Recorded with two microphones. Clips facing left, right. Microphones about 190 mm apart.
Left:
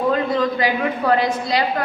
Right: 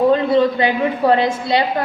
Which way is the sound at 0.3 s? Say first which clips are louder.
Right 4 dB; 25° right (ahead or behind).